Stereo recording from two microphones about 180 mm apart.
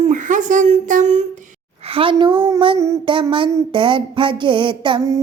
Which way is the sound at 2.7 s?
15° right (ahead or behind).